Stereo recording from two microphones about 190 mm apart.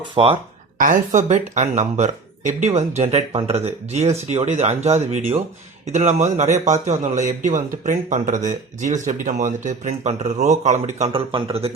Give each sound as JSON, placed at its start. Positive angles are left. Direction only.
{"t": 0.1, "sound": "speech", "side_deg": -30}
{"t": 0.8, "sound": "speech", "side_deg": -45}